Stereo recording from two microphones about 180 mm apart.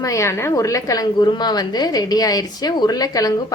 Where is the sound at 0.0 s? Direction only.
15° left (ahead or behind).